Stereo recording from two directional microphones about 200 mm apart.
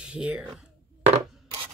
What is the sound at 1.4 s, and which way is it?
Chopping, 25° right (ahead or behind).